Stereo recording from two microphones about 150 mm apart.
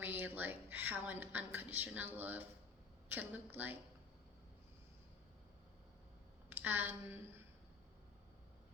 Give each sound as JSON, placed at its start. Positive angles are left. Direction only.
{"t": 0.0, "sound": "a woman's voice", "side_deg": -10}
{"t": 6.5, "sound": "a woman's voice", "side_deg": -10}